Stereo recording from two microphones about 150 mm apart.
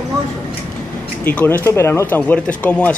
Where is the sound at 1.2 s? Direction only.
10° left (ahead or behind).